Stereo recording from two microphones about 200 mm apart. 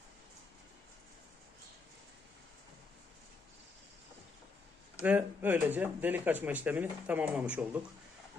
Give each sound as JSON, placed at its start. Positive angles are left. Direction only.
{"t": 5.0, "sound": "speech", "side_deg": -10}